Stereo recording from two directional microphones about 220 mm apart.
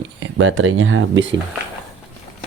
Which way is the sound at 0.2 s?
60° right (ahead or behind).